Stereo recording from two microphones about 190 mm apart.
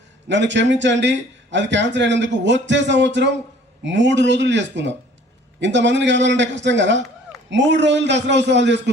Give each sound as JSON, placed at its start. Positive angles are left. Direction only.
{"t": 0.3, "sound": "a man's voice", "side_deg": -70}